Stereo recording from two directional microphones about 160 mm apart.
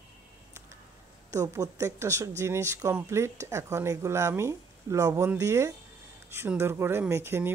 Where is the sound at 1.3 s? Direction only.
20° right (ahead or behind).